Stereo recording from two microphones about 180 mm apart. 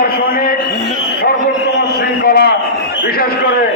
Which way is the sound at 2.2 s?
60° left (ahead or behind).